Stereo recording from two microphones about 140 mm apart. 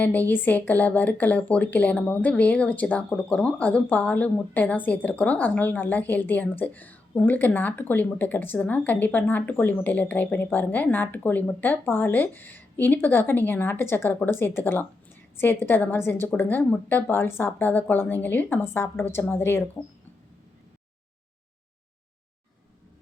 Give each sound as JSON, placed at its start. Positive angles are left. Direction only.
{"t": 0.0, "sound": "speech", "side_deg": 15}